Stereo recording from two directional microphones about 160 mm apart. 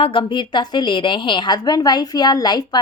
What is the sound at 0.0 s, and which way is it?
A woman's voice, 30° left (ahead or behind).